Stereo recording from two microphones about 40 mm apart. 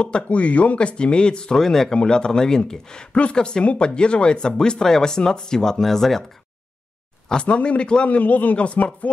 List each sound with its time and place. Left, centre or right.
0.0 s speech: left
0.7 s speech: left
1.6 s speech: centre
7.4 s speech: left
8.2 s speech: left
8.5 s speech: left